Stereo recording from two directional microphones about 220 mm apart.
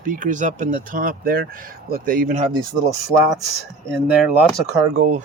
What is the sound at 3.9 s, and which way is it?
Speech, centre (ahead or behind).